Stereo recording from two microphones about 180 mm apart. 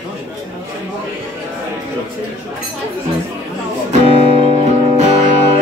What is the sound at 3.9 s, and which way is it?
Music, 35° right (ahead or behind).